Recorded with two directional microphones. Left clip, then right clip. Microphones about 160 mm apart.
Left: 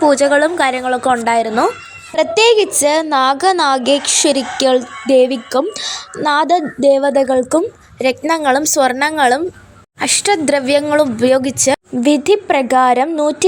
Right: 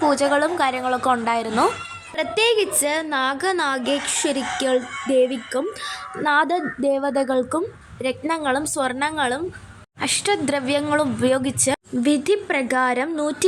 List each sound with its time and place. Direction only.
0.0 s speech: 25° left (ahead or behind)
8.3 s a woman's voice: 30° left (ahead or behind)